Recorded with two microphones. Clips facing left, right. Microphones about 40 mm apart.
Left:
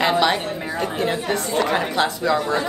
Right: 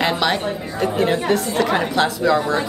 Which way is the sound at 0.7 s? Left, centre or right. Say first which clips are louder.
Right 5 dB; centre.